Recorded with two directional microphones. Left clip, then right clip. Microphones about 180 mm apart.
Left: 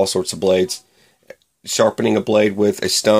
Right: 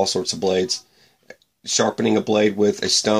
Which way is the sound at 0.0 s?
45° left (ahead or behind).